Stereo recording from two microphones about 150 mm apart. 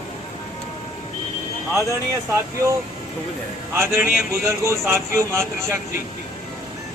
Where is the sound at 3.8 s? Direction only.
20° right (ahead or behind).